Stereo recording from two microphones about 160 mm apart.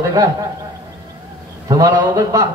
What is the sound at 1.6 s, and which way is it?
Speech, 25° right (ahead or behind).